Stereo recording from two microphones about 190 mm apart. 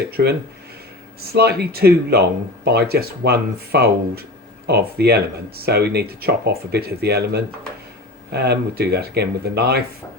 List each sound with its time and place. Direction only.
0.1 s speech: 55° right (ahead or behind)
8.3 s speech: 60° right (ahead or behind)